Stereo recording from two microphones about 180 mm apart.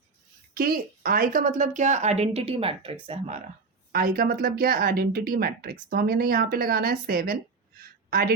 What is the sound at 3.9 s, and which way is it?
A woman's voice, 55° right (ahead or behind).